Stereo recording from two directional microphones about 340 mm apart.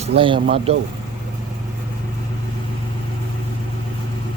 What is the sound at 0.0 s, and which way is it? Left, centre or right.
Speech, centre.